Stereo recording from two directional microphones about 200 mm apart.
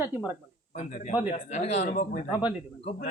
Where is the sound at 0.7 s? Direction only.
35° left (ahead or behind).